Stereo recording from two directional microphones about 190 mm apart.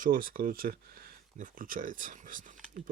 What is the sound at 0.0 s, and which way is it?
Speech, 45° right (ahead or behind).